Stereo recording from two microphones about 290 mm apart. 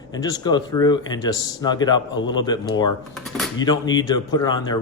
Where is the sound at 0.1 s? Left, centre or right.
Centre.